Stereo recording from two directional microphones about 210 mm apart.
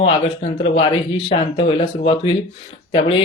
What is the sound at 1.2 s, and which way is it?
Speech, 25° left (ahead or behind).